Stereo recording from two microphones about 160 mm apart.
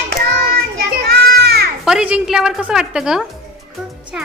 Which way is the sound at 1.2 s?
80° right.